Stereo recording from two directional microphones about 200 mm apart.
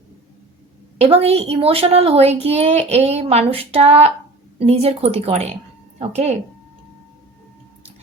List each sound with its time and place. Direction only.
0.9 s a child's voice: 30° right (ahead or behind)